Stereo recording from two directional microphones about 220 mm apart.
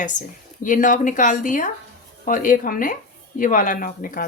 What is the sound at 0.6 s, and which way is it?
A woman's voice, 35° left (ahead or behind).